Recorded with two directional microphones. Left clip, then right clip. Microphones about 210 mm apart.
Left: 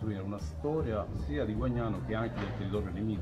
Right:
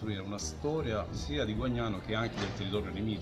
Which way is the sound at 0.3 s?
10° right (ahead or behind).